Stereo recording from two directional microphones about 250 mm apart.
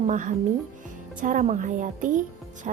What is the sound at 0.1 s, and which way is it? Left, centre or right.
A woman's voice, right.